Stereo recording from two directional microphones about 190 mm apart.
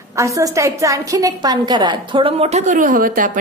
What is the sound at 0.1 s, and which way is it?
A woman's voice, 15° right (ahead or behind).